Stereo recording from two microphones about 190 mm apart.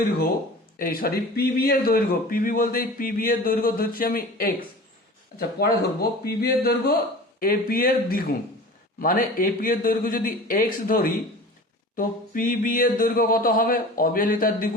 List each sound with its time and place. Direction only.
0.8 s speech: 50° left (ahead or behind)